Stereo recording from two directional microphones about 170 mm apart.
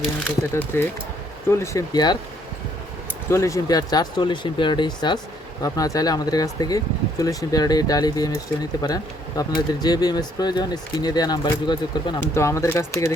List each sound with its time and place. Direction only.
0.3 s speech: 15° left (ahead or behind)
3.2 s speech: 15° left (ahead or behind)